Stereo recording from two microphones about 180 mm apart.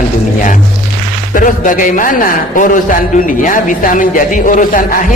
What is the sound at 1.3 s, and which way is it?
A man's voice, 50° left (ahead or behind).